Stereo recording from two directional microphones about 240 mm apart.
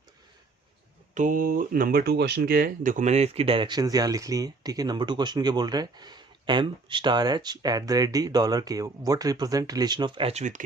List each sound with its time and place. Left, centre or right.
1.1 s speech: right